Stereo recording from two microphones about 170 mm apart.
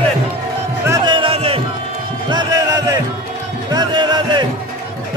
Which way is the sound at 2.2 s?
25° right (ahead or behind).